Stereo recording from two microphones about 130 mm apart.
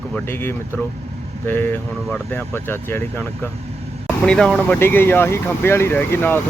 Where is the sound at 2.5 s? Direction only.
15° left (ahead or behind).